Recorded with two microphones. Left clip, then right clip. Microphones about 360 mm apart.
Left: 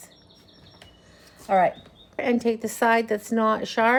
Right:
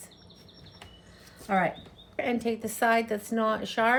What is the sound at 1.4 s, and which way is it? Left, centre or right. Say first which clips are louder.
A woman's voice: left 7 dB; centre.